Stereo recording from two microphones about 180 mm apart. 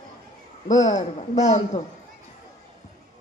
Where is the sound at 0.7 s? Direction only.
40° left (ahead or behind).